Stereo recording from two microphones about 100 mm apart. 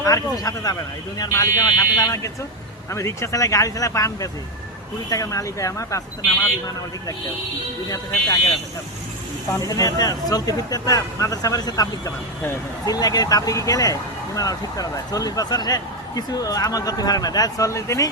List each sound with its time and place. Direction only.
0.0 s speech: 35° left (ahead or behind)
7.9 s speech: 35° left (ahead or behind)
9.5 s speech: 35° left (ahead or behind)